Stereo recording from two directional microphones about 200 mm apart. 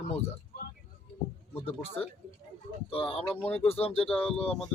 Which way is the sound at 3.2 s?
10° left (ahead or behind).